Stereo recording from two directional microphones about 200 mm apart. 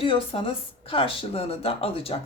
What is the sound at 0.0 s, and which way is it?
Speech, 25° left (ahead or behind).